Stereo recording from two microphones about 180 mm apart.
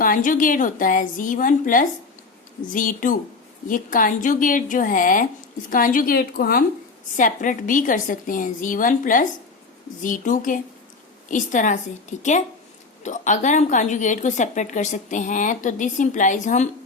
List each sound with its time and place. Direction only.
0.0 s a woman's voice: 50° left (ahead or behind)